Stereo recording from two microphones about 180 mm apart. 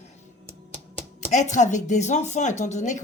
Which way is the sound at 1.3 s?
40° left (ahead or behind).